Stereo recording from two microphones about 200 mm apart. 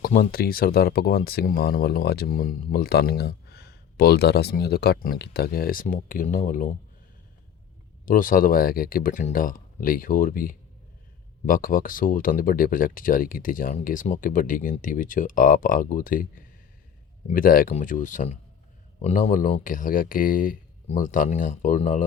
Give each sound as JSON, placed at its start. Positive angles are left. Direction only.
{"t": 0.0, "sound": "speech", "side_deg": 45}
{"t": 8.0, "sound": "speech", "side_deg": 45}